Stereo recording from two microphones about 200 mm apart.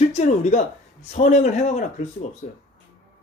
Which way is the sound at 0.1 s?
35° left (ahead or behind).